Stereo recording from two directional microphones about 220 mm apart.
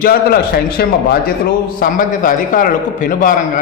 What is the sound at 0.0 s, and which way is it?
A man's voice, 45° left (ahead or behind).